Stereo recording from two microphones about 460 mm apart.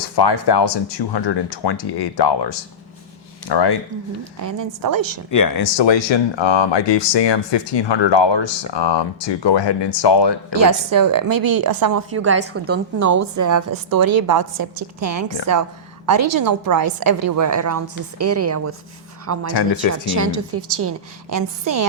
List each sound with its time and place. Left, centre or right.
0.2 s speech: left
4.4 s a woman's voice: right
5.3 s speech: left
5.7 s speech: left
10.5 s a woman's voice: right
12.1 s a woman's voice: right
13.0 s a woman's voice: right
16.0 s a woman's voice: right
21.2 s a woman's voice: right